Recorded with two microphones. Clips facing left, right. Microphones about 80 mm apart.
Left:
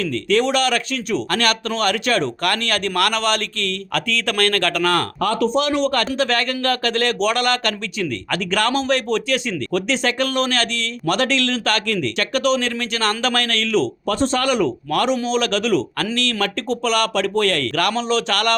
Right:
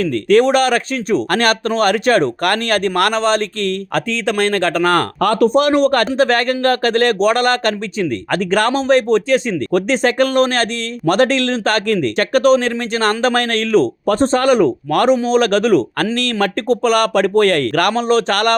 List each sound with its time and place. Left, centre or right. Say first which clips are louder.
0.0 s speech: right 6 dB; right
4.3 s speech: right 4 dB; right
5.2 s speech: right 7 dB; right